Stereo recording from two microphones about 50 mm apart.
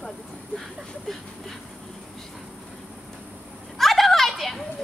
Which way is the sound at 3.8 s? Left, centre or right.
Centre.